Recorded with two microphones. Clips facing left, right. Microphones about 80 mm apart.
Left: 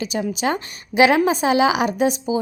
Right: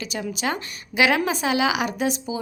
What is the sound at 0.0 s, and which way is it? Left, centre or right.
A woman's voice, left.